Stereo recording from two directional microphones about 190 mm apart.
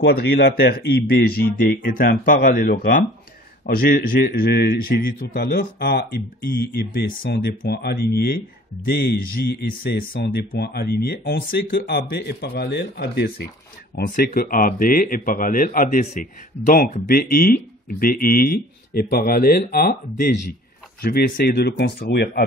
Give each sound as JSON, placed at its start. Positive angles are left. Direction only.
{"t": 0.0, "sound": "a man's voice", "side_deg": 60}